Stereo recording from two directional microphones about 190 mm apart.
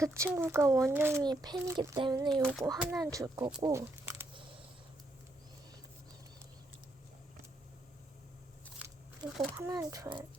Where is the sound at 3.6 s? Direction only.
15° right (ahead or behind).